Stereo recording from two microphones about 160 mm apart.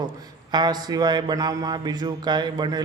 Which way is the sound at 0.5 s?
25° right (ahead or behind).